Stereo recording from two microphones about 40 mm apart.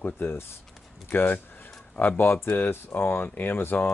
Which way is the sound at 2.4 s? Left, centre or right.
Left.